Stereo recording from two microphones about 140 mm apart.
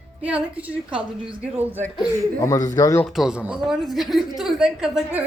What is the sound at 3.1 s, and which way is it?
A woman's voice, 5° right (ahead or behind).